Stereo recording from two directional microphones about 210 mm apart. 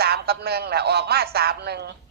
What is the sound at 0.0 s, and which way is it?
A man's voice, 50° right (ahead or behind).